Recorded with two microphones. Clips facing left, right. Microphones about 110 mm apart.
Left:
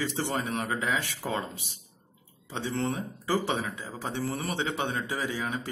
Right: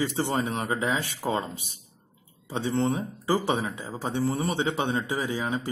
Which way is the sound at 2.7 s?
25° right (ahead or behind).